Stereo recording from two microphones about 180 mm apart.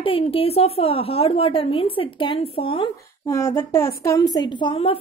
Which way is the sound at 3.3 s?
15° left (ahead or behind).